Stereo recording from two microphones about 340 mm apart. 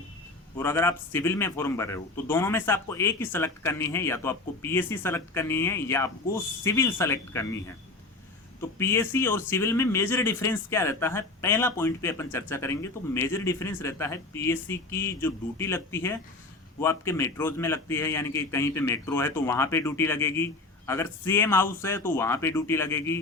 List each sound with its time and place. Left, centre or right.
0.5 s speech: centre
8.8 s speech: centre